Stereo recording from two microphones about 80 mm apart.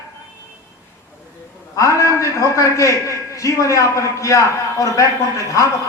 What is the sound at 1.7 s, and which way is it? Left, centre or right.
A man's voice, left.